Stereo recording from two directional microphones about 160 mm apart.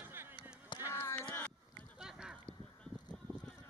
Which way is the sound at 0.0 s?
15° right (ahead or behind).